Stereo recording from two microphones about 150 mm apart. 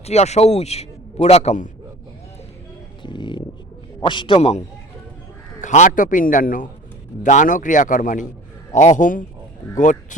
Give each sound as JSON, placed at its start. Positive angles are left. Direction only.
{"t": 0.0, "sound": "a man's voice", "side_deg": 45}
{"t": 3.0, "sound": "a man's voice", "side_deg": 30}
{"t": 4.4, "sound": "a man's voice", "side_deg": 45}
{"t": 5.6, "sound": "a man's voice", "side_deg": 55}